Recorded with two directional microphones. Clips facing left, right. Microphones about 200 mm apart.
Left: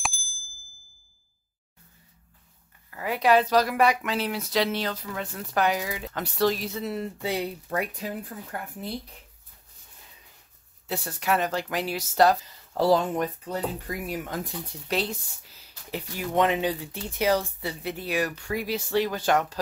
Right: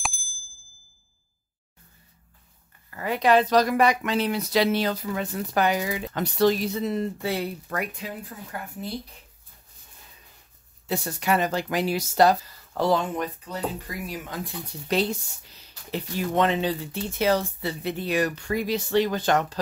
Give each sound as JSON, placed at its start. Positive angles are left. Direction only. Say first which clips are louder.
{"t": 0.0, "sound": "ding", "louder": "even", "side_deg": 0}
{"t": 2.9, "sound": "speech", "louder": "right 1 dB", "side_deg": 5}
{"t": 7.2, "sound": "speech", "louder": "right 1 dB", "side_deg": 20}
{"t": 8.0, "sound": "speech", "louder": "left 2 dB", "side_deg": 50}
{"t": 10.9, "sound": "speech", "louder": "right 2 dB", "side_deg": 0}
{"t": 12.7, "sound": "speech", "louder": "left 2 dB", "side_deg": 35}
{"t": 14.0, "sound": "speech", "louder": "left 2 dB", "side_deg": 50}
{"t": 14.9, "sound": "speech", "louder": "right 4 dB", "side_deg": 5}